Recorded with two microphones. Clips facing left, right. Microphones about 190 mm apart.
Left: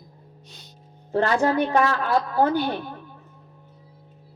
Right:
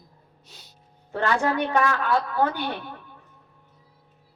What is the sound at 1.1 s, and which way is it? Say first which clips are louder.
Speech: left 3 dB; 35° left (ahead or behind).